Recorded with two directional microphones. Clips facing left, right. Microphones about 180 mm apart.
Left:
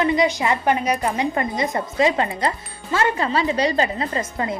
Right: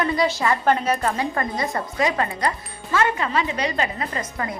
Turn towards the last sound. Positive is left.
turn(degrees=25)  # may be behind; listen again after turning